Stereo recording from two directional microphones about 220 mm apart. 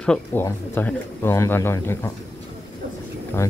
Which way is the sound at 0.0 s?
5° left (ahead or behind).